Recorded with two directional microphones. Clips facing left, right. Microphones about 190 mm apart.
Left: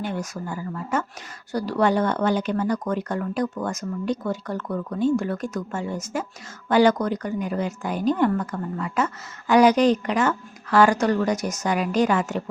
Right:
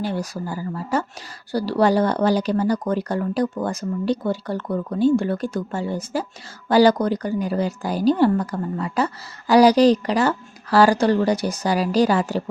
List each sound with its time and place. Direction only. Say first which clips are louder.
0.0 s a woman's voice: right 3 dB; 35° right (ahead or behind)